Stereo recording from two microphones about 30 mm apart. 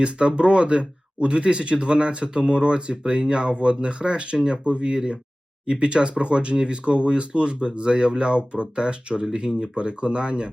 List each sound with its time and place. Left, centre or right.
0.0 s speech: right
9.3 s speech: right
9.7 s speech: right